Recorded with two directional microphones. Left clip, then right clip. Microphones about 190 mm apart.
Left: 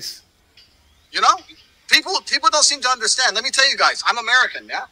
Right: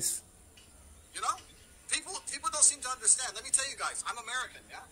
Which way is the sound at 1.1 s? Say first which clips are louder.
Left 19 dB; 40° left (ahead or behind).